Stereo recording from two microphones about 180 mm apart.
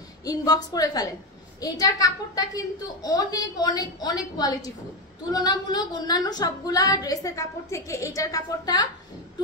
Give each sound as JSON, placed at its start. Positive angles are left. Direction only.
{"t": 0.2, "sound": "a woman's voice", "side_deg": 20}